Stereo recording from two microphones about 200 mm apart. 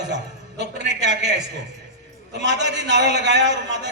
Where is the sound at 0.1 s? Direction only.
60° right (ahead or behind).